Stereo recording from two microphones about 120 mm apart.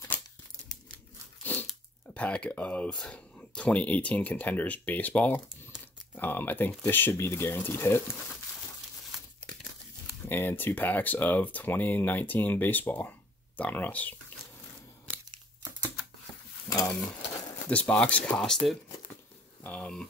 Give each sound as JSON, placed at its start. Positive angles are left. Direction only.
{"t": 1.4, "sound": "crunch", "side_deg": 15}
{"t": 1.7, "sound": "speech", "side_deg": 10}
{"t": 10.2, "sound": "speech", "side_deg": 15}
{"t": 16.6, "sound": "pigeon", "side_deg": 30}
{"t": 17.6, "sound": "speech", "side_deg": 10}
{"t": 19.6, "sound": "speech", "side_deg": 10}